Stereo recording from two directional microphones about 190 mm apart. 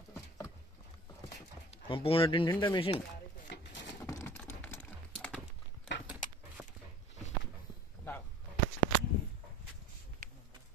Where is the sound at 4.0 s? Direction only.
15° left (ahead or behind).